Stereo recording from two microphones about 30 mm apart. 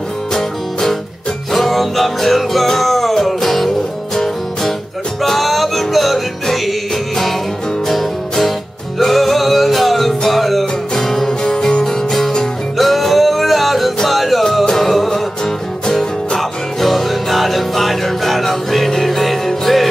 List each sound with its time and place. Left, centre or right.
0.3 s music: centre
5.2 s music: centre
7.9 s music: centre
14.6 s music: centre
16.3 s music: centre